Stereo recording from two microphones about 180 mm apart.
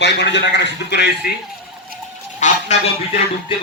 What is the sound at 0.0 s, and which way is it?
A man's voice, 75° left (ahead or behind).